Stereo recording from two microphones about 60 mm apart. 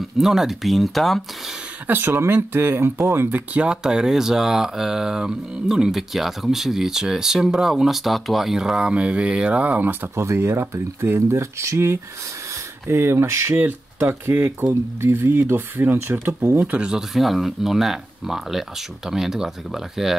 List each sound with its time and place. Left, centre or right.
0.2 s speech: centre
1.9 s speech: right
3.5 s speech: centre
10.1 s speech: right
16.3 s speech: right
16.6 s speech: centre
17.1 s speech: centre